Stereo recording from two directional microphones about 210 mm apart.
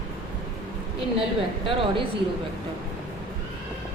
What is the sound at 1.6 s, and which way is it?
Speech, 25° right (ahead or behind).